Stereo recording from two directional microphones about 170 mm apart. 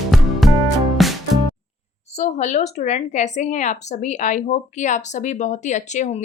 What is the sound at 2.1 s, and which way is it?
A woman's voice, 40° left (ahead or behind).